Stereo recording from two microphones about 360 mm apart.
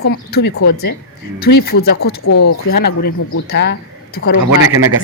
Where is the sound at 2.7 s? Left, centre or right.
Left.